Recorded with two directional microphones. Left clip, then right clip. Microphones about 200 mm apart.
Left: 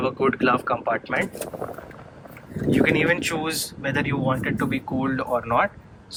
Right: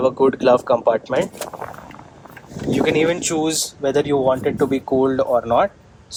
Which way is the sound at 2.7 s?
25° right (ahead or behind).